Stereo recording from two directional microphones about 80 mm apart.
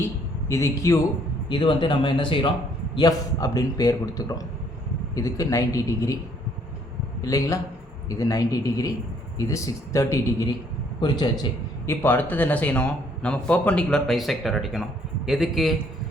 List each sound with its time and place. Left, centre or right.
0.0 s a man's voice: left
1.5 s a man's voice: left
2.9 s speech: left
7.2 s a man's voice: left
11.0 s a man's voice: left
11.9 s a man's voice: left
14.1 s speech: centre